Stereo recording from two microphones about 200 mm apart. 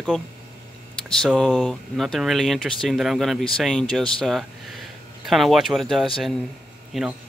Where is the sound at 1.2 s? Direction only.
5° left (ahead or behind).